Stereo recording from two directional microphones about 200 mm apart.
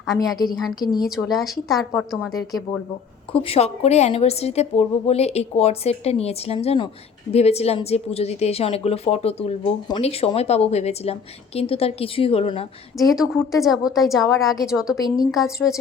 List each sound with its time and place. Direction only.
0.6 s a woman's voice: centre (ahead or behind)
3.4 s a woman's voice: 30° left (ahead or behind)
13.0 s a woman's voice: centre (ahead or behind)